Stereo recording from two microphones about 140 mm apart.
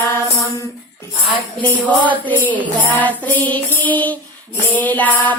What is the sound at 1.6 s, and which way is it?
Music, 10° left (ahead or behind).